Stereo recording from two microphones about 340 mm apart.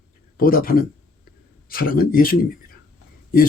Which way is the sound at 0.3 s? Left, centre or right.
Left.